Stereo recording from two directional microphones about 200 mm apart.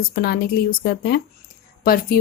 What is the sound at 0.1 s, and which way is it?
Speech, 45° left (ahead or behind).